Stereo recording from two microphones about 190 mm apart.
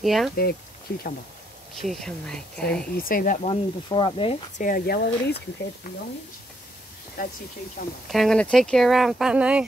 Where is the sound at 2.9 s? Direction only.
50° left (ahead or behind).